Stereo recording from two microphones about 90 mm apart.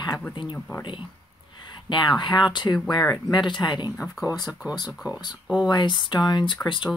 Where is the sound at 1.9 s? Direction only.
55° left (ahead or behind).